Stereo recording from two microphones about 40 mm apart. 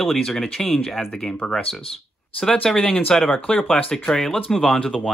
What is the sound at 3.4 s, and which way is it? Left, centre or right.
Speech, left.